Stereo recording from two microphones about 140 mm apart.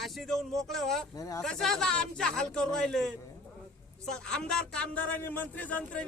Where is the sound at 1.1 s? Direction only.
25° left (ahead or behind).